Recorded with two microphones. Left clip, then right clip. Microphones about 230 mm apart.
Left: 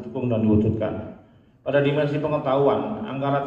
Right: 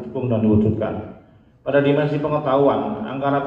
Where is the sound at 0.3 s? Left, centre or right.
Left.